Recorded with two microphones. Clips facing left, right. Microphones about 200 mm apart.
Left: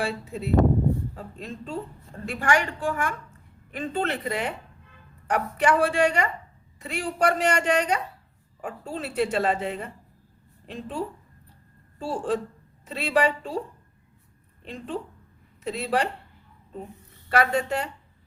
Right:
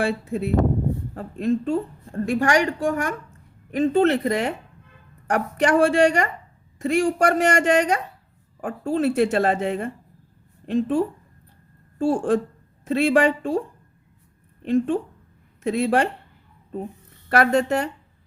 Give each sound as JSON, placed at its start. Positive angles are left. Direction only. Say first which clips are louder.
{"t": 0.0, "sound": "a woman's voice", "louder": "right 6 dB", "side_deg": -55}
{"t": 2.4, "sound": "a woman's voice", "louder": "right 3 dB", "side_deg": -40}
{"t": 14.6, "sound": "a woman's voice", "louder": "right 12 dB", "side_deg": -50}
{"t": 17.2, "sound": "a woman's voice", "louder": "right 5 dB", "side_deg": -50}